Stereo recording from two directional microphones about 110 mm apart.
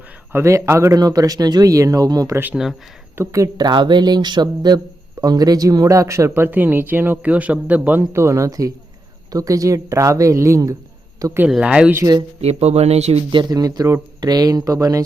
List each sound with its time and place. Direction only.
0.3 s speech: 25° right (ahead or behind)
2.6 s speech: 5° right (ahead or behind)
3.2 s speech: 30° right (ahead or behind)
3.7 s speech: 45° right (ahead or behind); by 10.8 s 30° right (ahead or behind)
11.4 s speech: 10° right (ahead or behind)
11.9 s speech: 30° right (ahead or behind)
12.4 s speech: 70° right (ahead or behind)
13.3 s speech: 35° right (ahead or behind)